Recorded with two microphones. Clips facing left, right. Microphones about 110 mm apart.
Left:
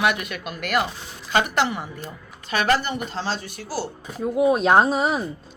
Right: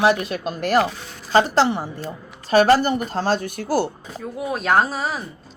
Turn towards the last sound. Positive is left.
turn(degrees=20)  # may be behind; listen again after turning